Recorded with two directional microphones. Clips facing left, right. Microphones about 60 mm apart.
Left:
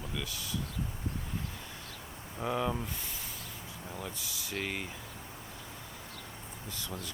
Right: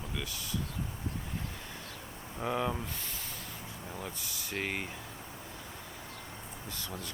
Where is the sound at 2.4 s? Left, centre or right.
Centre.